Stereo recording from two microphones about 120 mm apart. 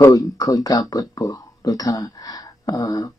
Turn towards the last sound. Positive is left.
turn(degrees=30)  # may be behind; listen again after turning